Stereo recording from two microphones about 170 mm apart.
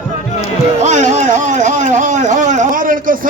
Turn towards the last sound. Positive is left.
turn(degrees=-55)  # may be behind; listen again after turning